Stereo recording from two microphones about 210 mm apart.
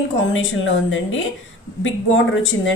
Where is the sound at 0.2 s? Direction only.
65° left (ahead or behind).